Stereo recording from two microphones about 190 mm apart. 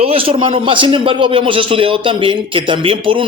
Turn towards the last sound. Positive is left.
turn(degrees=-25)  # may be behind; listen again after turning